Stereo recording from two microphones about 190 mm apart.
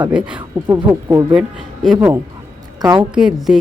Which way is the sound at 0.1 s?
5° right (ahead or behind).